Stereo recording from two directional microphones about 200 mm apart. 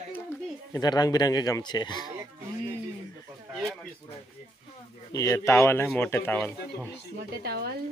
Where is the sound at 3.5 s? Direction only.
Centre (ahead or behind).